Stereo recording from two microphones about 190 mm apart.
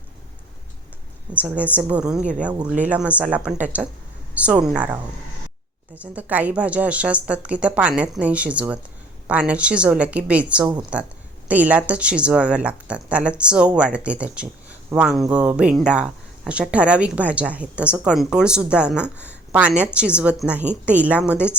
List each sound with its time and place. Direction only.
1.3 s speech: 10° right (ahead or behind)